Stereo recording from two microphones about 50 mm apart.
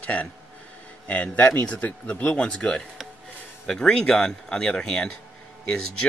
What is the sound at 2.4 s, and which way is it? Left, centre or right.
Speech, left.